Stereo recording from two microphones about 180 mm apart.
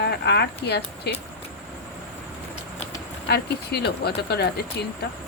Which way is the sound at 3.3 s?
65° left (ahead or behind).